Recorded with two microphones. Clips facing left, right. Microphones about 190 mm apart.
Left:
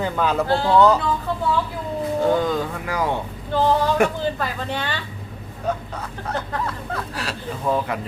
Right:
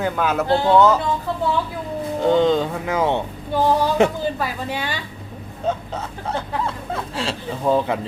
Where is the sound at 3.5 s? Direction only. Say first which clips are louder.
Right 1 dB; 10° right (ahead or behind).